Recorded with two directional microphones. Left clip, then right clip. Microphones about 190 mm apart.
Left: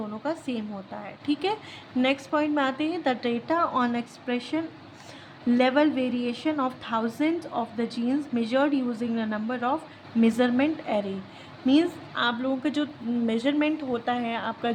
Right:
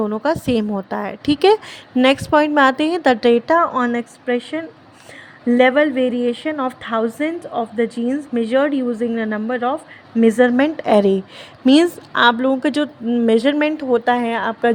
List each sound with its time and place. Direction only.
0.1 s a woman's voice: 50° right (ahead or behind)
3.7 s a woman's voice: 25° right (ahead or behind)